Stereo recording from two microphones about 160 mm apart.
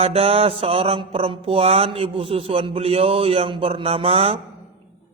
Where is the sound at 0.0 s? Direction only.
40° right (ahead or behind).